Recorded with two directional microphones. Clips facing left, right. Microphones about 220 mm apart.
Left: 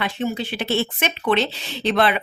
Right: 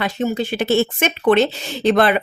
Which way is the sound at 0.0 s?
45° right (ahead or behind).